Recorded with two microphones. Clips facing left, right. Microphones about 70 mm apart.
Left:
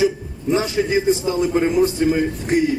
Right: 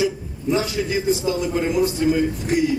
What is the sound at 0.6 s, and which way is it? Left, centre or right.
A man's voice, left.